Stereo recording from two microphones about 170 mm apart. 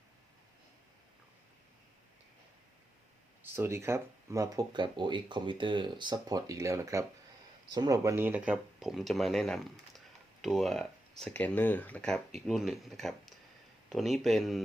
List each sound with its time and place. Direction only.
3.4 s speech: 15° right (ahead or behind)